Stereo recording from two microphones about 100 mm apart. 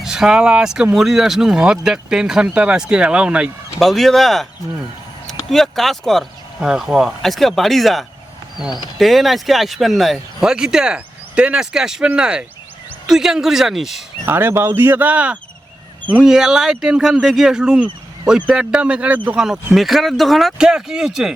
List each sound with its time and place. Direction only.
0.0 s speech: 5° right (ahead or behind)
3.8 s speech: centre (ahead or behind)
5.5 s speech: 5° left (ahead or behind)
14.3 s speech: 20° right (ahead or behind)
19.4 s speech: 5° right (ahead or behind)